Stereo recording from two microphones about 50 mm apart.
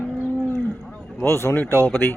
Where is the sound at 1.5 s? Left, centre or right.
Left.